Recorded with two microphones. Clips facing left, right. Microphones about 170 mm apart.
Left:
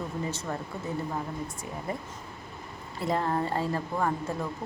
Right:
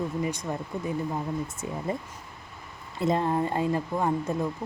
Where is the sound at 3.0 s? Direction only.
20° right (ahead or behind).